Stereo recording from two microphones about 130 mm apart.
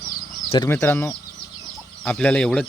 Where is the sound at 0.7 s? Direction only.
20° left (ahead or behind).